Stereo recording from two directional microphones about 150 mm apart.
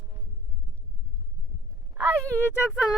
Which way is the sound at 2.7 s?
5° right (ahead or behind).